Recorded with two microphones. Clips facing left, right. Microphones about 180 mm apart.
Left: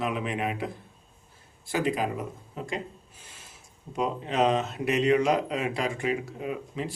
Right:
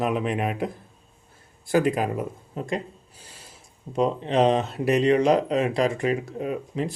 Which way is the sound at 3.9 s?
30° right (ahead or behind).